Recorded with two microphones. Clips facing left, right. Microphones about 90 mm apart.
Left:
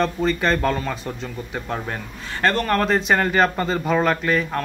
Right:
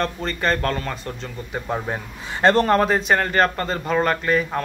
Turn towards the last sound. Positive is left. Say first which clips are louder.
# even
turn(degrees=-5)  # may be behind; listen again after turning